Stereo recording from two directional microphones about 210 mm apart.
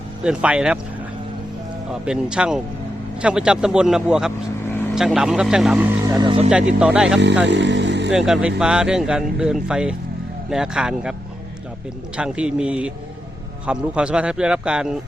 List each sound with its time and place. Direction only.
0.2 s speech: 5° right (ahead or behind)
1.9 s speech: 5° right (ahead or behind)
6.1 s speech: 20° right (ahead or behind)
6.5 s speech: 5° right (ahead or behind)
7.4 s speech: 60° right (ahead or behind)
8.1 s speech: 5° right (ahead or behind)
12.1 s speech: 5° right (ahead or behind)